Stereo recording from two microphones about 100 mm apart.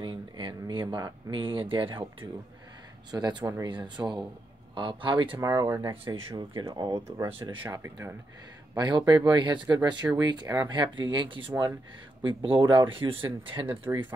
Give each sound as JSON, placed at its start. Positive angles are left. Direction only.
{"t": 0.0, "sound": "speech", "side_deg": -55}
{"t": 3.1, "sound": "speech", "side_deg": -45}
{"t": 5.4, "sound": "speech", "side_deg": -35}
{"t": 6.0, "sound": "speech", "side_deg": -60}
{"t": 7.7, "sound": "speech", "side_deg": -30}
{"t": 8.7, "sound": "speech", "side_deg": -45}
{"t": 10.8, "sound": "speech", "side_deg": -55}